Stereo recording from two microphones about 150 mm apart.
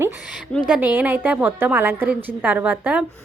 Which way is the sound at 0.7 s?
10° right (ahead or behind).